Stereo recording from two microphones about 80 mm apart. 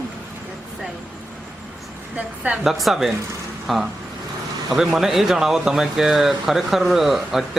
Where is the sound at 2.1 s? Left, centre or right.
Centre.